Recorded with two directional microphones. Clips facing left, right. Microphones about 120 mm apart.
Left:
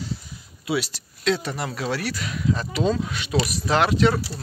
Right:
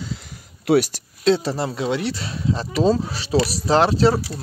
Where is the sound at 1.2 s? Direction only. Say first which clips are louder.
Right 6 dB; 30° right (ahead or behind).